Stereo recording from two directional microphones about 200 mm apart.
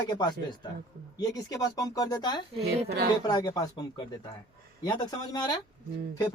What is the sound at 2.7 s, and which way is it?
Speech, 50° right (ahead or behind).